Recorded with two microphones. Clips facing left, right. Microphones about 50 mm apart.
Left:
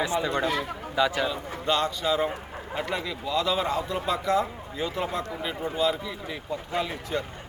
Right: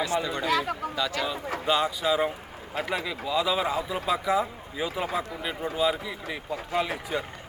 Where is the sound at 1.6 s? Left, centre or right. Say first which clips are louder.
Even; centre.